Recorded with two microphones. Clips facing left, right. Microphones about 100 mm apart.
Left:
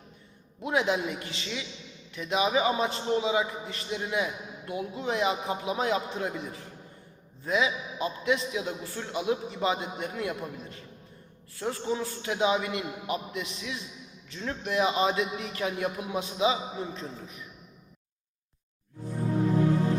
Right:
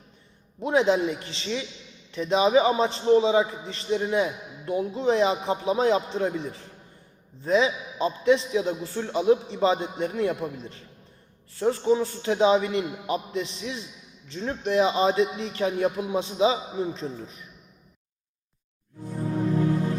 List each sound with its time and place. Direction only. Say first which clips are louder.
0.6 s a man's voice: right 6 dB; 30° right (ahead or behind)